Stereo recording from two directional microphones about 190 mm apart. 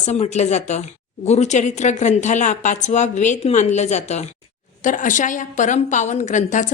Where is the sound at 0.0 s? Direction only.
35° left (ahead or behind).